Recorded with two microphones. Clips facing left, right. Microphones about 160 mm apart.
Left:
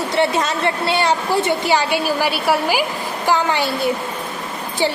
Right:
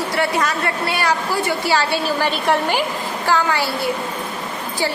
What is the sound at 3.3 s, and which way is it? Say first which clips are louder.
Speech: left 1 dB; 20° left (ahead or behind).